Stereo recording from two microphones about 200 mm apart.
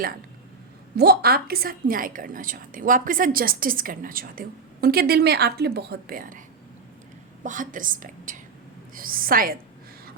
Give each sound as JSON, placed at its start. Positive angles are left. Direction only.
{"t": 0.9, "sound": "a woman's voice", "side_deg": -55}
{"t": 7.4, "sound": "a woman's voice", "side_deg": -40}